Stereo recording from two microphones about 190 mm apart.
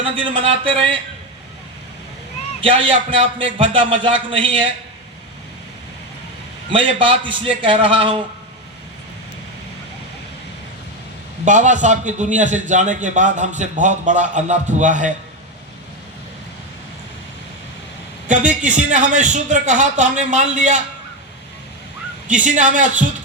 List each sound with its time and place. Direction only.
0.0 s a man's voice: 25° right (ahead or behind)
2.6 s a man's voice: 30° right (ahead or behind)
6.7 s a man's voice: 25° right (ahead or behind)
11.4 s a man's voice: 40° right (ahead or behind)
18.3 s a man's voice: 40° right (ahead or behind)
22.4 s a man's voice: 40° right (ahead or behind)